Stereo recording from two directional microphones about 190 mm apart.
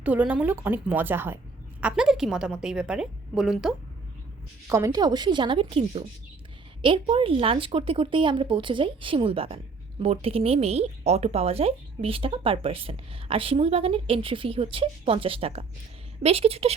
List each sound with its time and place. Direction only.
0.0 s a woman's voice: 10° right (ahead or behind)
4.7 s a woman's voice: 20° right (ahead or behind)